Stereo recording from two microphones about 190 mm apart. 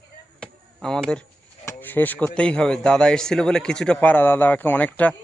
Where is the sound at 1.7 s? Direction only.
10° left (ahead or behind).